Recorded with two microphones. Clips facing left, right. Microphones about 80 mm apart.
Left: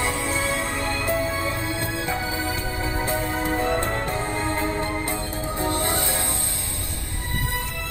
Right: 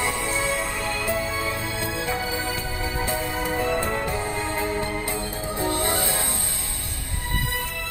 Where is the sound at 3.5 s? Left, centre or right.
Centre.